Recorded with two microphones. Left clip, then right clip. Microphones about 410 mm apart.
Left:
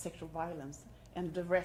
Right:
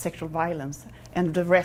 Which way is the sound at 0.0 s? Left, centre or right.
Right.